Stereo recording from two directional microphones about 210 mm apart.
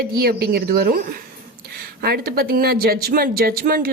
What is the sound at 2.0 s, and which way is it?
A woman's voice, 50° right (ahead or behind).